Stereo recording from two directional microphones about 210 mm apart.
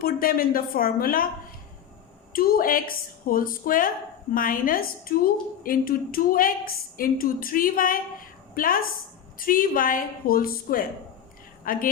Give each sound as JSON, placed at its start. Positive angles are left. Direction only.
{"t": 0.0, "sound": "a woman's voice", "side_deg": 45}
{"t": 2.3, "sound": "a woman's voice", "side_deg": 45}